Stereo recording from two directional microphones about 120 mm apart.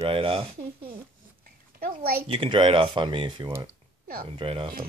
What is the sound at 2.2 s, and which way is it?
Speech, 45° right (ahead or behind).